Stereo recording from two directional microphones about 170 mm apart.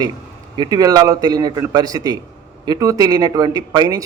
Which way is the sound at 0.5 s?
25° right (ahead or behind).